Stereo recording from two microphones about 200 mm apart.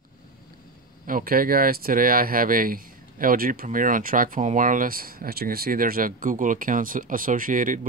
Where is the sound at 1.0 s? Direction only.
45° right (ahead or behind).